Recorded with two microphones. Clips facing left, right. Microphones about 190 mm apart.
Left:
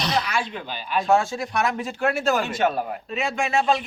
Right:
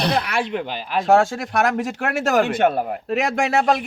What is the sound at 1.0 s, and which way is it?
A man's voice, 85° right.